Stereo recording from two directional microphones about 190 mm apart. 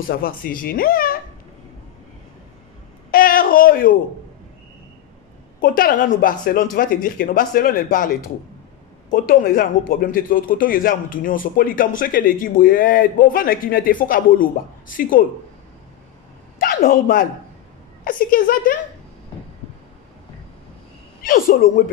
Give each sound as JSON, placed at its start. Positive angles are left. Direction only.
{"t": 0.1, "sound": "a man's voice", "side_deg": 50}
{"t": 3.1, "sound": "a man's voice", "side_deg": 50}
{"t": 5.6, "sound": "a man's voice", "side_deg": 45}
{"t": 9.1, "sound": "a man's voice", "side_deg": 50}
{"t": 16.5, "sound": "a man's voice", "side_deg": 50}
{"t": 21.2, "sound": "a man's voice", "side_deg": 50}